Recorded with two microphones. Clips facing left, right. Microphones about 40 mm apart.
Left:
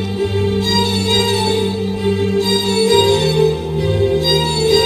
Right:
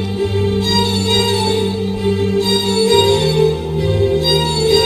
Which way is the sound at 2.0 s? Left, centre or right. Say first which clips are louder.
Even; centre.